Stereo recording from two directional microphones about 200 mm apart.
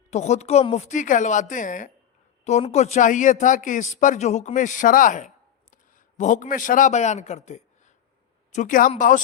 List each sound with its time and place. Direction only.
0.1 s a woman's voice: 35° left (ahead or behind)